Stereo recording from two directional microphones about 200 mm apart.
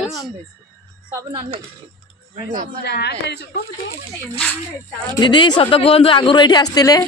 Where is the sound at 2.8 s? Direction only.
55° left (ahead or behind).